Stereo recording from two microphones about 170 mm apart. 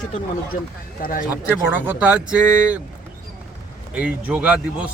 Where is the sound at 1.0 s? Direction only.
55° left (ahead or behind).